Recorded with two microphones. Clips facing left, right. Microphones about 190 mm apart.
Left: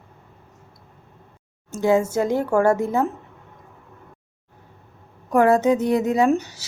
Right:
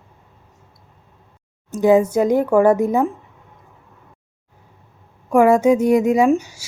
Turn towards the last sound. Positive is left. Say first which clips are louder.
# right 3 dB
turn(degrees=-10)  # may be behind; listen again after turning